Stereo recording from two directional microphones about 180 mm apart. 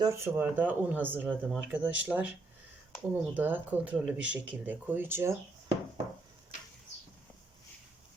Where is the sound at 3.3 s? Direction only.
10° right (ahead or behind).